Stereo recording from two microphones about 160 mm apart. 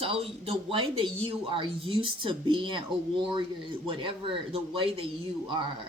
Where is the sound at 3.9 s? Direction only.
35° right (ahead or behind).